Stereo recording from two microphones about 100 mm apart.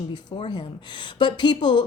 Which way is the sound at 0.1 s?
50° left (ahead or behind).